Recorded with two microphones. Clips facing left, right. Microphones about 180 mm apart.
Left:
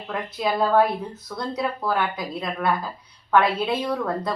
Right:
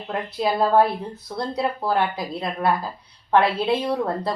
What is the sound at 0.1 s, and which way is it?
Speech, 30° right (ahead or behind).